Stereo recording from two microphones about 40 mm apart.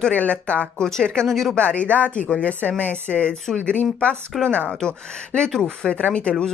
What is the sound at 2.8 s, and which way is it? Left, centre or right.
Speech, left.